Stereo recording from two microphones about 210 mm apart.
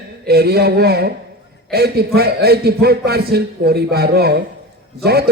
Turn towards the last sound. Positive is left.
turn(degrees=-50)  # may be behind; listen again after turning